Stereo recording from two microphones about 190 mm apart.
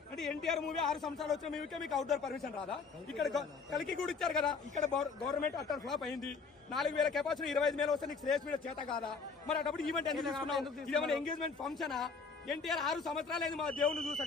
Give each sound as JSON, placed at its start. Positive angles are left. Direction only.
{"t": 0.2, "sound": "a man's voice", "side_deg": 0}
{"t": 8.9, "sound": "a man's voice", "side_deg": 25}
{"t": 9.5, "sound": "a man's voice", "side_deg": 0}